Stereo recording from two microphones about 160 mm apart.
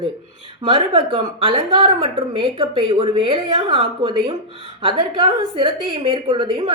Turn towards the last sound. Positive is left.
turn(degrees=-30)  # may be behind; listen again after turning